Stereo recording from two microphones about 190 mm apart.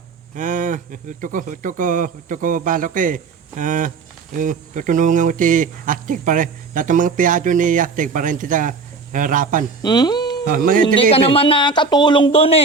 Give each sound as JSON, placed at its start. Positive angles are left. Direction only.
{"t": 0.3, "sound": "speech", "side_deg": -40}
{"t": 9.8, "sound": "a sound", "side_deg": 20}
{"t": 10.5, "sound": "speech", "side_deg": -45}
{"t": 11.1, "sound": "speech", "side_deg": 30}